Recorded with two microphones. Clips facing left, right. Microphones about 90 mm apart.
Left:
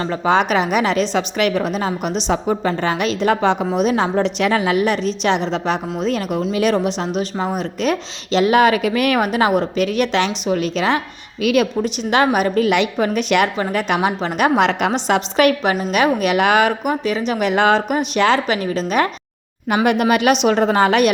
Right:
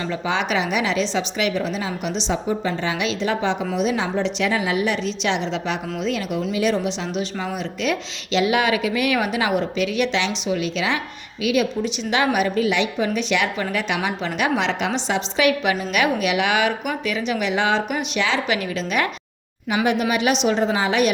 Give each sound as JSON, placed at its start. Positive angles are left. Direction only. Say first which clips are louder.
{"t": 0.0, "sound": "a woman's voice", "louder": "left 7 dB", "side_deg": 45}
{"t": 6.5, "sound": "a woman's voice", "louder": "left 4 dB", "side_deg": 55}
{"t": 11.4, "sound": "a woman's voice", "louder": "left 4 dB", "side_deg": 55}
{"t": 13.6, "sound": "a woman's voice", "louder": "left 5 dB", "side_deg": 35}
{"t": 15.9, "sound": "speech", "louder": "left 6 dB", "side_deg": 40}
{"t": 19.6, "sound": "speech", "louder": "left 4 dB", "side_deg": 55}